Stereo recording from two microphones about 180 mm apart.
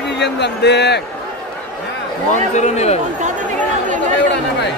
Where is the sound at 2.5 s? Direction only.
40° left (ahead or behind).